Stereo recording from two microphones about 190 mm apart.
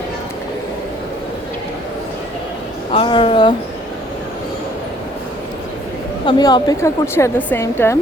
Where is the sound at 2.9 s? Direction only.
25° left (ahead or behind).